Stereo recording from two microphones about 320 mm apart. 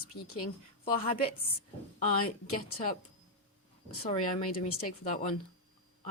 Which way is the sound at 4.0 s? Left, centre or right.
Left.